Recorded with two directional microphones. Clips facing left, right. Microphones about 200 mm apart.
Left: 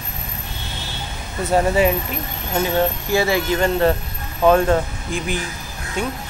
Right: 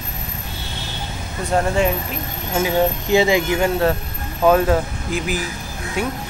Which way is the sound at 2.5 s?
10° right (ahead or behind).